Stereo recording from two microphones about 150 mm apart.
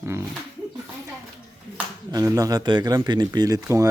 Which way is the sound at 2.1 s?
25° right (ahead or behind).